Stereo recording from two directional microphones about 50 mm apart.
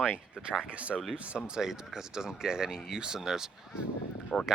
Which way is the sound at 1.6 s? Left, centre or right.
Centre.